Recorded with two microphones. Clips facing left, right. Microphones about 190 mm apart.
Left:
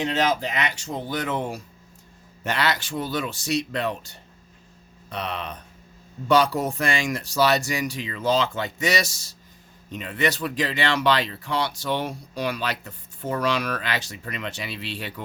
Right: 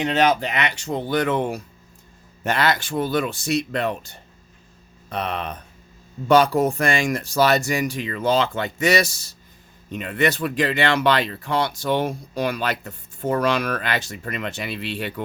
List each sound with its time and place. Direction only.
0.0 s speech: 65° right (ahead or behind)
2.4 s speech: 50° right (ahead or behind)